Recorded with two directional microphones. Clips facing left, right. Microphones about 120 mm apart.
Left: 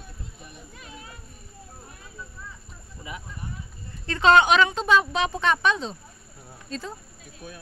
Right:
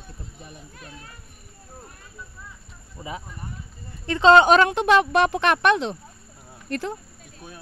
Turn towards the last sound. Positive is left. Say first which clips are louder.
# right 6 dB
turn(degrees=-70)  # may be behind; listen again after turning